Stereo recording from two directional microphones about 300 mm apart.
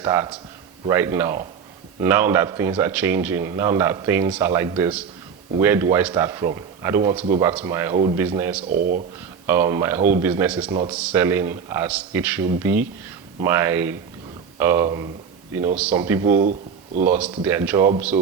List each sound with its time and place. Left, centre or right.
0.0 s a man's voice: centre
10.7 s a man's voice: centre
10.9 s a man's voice: centre
16.4 s speech: right
17.1 s a man's voice: centre